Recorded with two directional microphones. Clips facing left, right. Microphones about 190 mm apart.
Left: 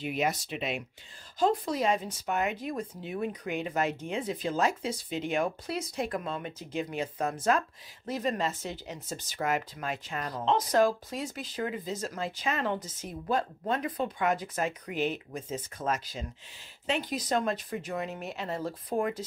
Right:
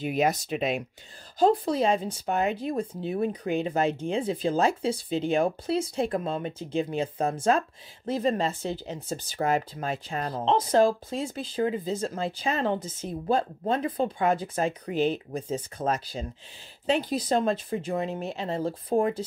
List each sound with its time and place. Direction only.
0.0 s speech: 40° right (ahead or behind)
1.4 s speech: 30° right (ahead or behind)